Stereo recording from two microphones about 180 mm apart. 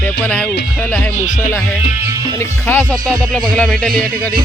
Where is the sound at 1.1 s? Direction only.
40° left (ahead or behind).